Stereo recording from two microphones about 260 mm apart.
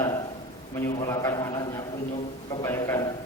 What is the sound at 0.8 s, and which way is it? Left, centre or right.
Speech, centre.